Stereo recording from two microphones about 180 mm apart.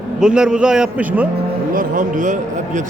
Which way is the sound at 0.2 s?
5° right (ahead or behind).